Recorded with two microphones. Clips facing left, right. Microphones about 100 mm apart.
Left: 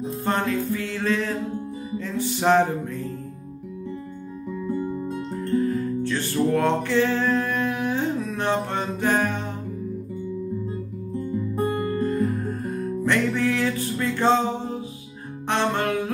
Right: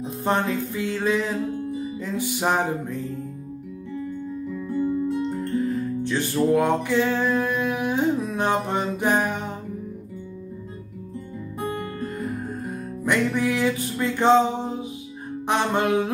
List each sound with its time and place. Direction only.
0.0 s music: 15° right (ahead or behind)
5.6 s music: 15° right (ahead or behind)
6.3 s a sound: 10° right (ahead or behind)
13.0 s music: 15° right (ahead or behind)